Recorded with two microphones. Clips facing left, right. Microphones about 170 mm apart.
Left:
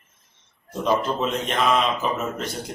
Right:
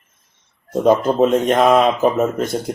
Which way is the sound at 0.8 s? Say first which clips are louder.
Right 9 dB; 45° right (ahead or behind).